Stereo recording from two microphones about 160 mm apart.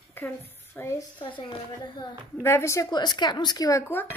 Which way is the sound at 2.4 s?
15° left (ahead or behind).